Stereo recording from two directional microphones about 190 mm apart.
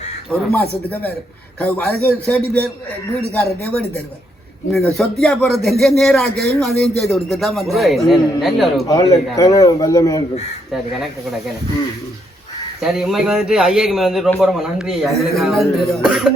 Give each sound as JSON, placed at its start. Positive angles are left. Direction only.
{"t": 0.3, "sound": "a man's voice", "side_deg": 10}
{"t": 3.6, "sound": "a man's voice", "side_deg": 10}
{"t": 8.9, "sound": "a man's voice", "side_deg": 20}
{"t": 12.8, "sound": "a man's voice", "side_deg": 0}